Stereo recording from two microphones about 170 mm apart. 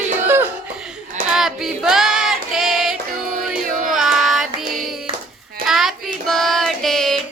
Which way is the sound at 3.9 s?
Centre (ahead or behind).